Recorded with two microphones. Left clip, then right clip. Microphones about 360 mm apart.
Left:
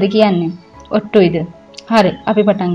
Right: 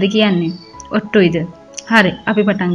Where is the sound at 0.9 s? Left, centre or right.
Centre.